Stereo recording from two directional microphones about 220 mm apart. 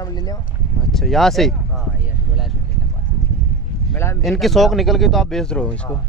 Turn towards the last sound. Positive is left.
turn(degrees=5)  # may be behind; listen again after turning